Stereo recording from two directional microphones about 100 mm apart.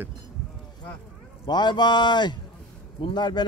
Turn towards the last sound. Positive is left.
turn(degrees=45)  # may be behind; listen again after turning